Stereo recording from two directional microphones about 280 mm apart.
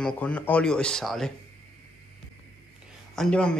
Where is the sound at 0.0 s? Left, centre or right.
Centre.